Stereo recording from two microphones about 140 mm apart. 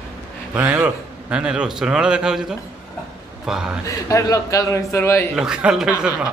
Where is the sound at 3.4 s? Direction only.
5° right (ahead or behind).